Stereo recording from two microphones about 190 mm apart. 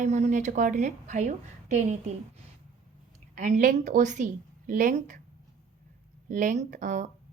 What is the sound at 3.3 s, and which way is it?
A woman's voice, 40° right (ahead or behind).